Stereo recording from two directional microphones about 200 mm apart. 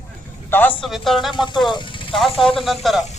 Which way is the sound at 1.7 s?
25° left (ahead or behind).